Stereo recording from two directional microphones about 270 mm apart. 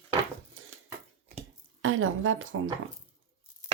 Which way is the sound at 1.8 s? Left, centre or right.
Right.